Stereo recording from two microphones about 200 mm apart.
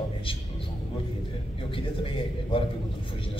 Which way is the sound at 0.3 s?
25° left (ahead or behind).